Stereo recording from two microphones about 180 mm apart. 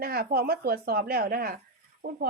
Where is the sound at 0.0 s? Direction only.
55° right (ahead or behind).